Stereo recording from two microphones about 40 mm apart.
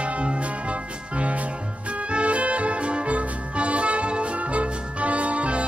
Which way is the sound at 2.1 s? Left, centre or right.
Right.